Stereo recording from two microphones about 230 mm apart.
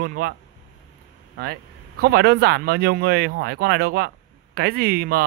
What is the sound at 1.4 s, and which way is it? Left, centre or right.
Speech, right.